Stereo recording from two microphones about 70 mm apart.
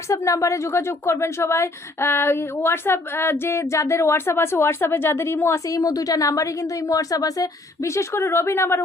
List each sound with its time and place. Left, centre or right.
0.1 s speech: left
5.6 s a woman's voice: left